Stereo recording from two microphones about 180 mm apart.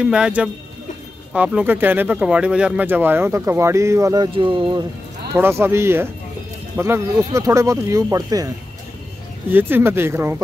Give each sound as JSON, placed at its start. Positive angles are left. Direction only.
{"t": 0.0, "sound": "speech", "side_deg": -5}
{"t": 5.3, "sound": "speech", "side_deg": -15}
{"t": 9.5, "sound": "speech", "side_deg": -10}